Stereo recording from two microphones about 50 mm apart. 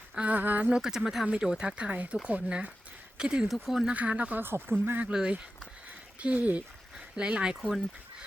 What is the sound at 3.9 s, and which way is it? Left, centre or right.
Speech, right.